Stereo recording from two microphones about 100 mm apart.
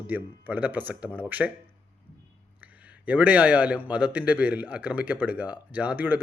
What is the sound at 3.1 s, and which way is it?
A man's voice, 15° right (ahead or behind).